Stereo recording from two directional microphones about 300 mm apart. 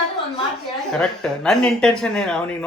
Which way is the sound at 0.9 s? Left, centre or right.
Centre.